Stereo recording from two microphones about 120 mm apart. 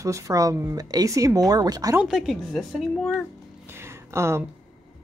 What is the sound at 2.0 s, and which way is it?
Speech, 5° right (ahead or behind).